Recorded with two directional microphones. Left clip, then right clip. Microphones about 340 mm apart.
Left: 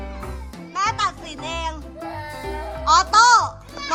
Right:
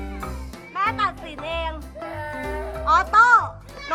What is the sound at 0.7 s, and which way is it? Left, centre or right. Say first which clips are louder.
Music: left 1 dB; centre.